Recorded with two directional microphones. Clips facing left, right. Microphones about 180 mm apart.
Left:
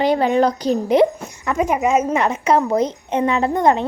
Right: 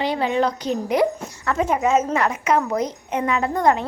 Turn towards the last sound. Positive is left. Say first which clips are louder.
# left 3 dB
turn(degrees=25)  # may be behind; listen again after turning